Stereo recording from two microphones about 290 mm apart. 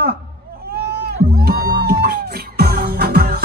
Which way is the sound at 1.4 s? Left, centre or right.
Right.